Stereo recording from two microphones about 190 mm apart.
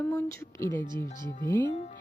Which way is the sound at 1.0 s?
45° left (ahead or behind).